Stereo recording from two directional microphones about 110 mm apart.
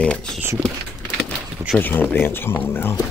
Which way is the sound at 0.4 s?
25° right (ahead or behind).